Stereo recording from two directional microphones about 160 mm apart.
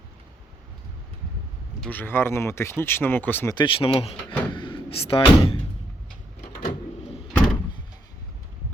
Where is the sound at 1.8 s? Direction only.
10° left (ahead or behind).